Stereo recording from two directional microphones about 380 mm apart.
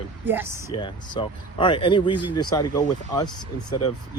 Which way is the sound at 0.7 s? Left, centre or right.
Centre.